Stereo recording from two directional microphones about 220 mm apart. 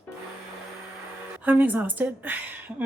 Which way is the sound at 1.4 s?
10° right (ahead or behind).